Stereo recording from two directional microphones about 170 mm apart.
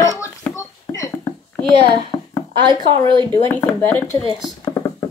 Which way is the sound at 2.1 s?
25° left (ahead or behind).